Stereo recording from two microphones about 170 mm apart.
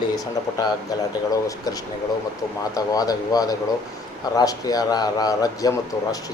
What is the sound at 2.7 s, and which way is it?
Speech, 20° left (ahead or behind).